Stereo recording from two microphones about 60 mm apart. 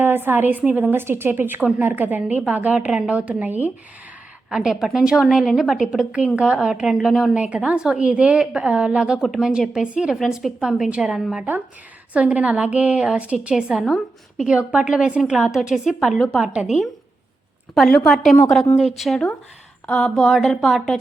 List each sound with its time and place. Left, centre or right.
0.0 s a woman's voice: right
2.2 s a woman's voice: right
4.4 s a woman's voice: centre
6.1 s a woman's voice: centre
7.3 s a woman's voice: centre
12.1 s a woman's voice: right
16.4 s a woman's voice: centre
17.7 s speech: centre
19.9 s speech: centre
20.1 s speech: centre